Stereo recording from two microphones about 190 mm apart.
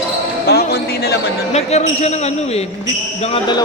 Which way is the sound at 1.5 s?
35° left (ahead or behind).